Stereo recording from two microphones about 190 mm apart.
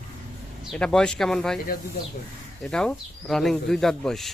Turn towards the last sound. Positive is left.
turn(degrees=0)  # may be behind; listen again after turning